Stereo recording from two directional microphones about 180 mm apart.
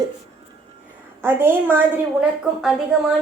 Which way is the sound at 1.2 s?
10° right (ahead or behind).